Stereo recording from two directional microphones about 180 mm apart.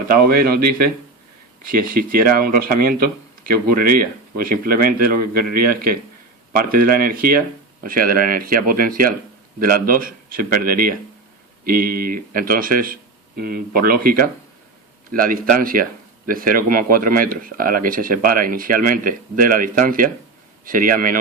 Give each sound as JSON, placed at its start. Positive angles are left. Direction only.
{"t": 0.3, "sound": "speech", "side_deg": -55}